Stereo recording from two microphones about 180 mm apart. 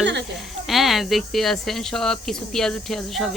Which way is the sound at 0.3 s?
Centre (ahead or behind).